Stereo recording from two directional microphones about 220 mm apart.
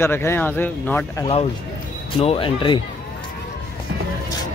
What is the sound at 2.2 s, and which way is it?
Speech, 25° left (ahead or behind).